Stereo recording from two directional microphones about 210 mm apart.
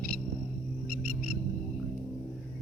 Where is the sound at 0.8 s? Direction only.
45° right (ahead or behind).